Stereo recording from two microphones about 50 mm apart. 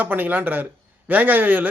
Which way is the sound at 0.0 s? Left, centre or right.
Right.